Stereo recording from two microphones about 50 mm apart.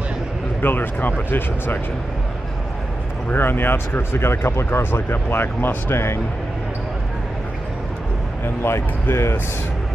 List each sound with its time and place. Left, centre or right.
0.6 s speech: left
3.3 s speech: left
5.9 s speech: left
8.6 s speech: left